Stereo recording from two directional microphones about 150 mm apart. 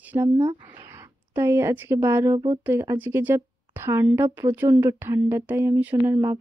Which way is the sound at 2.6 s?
20° right (ahead or behind).